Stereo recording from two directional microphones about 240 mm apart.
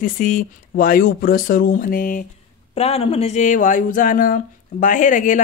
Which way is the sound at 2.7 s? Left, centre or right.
Left.